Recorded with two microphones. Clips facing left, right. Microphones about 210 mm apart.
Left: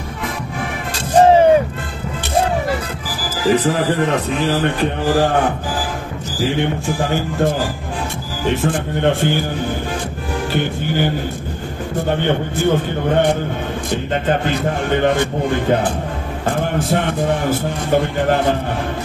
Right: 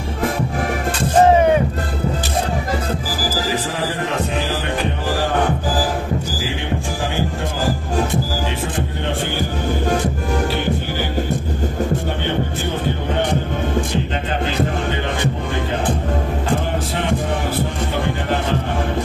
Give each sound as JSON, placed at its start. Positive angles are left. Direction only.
{"t": 1.3, "sound": "music", "side_deg": 30}
{"t": 14.4, "sound": "speech", "side_deg": 50}